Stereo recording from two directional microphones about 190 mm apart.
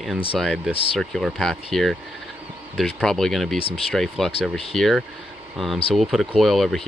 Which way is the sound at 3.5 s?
30° left (ahead or behind).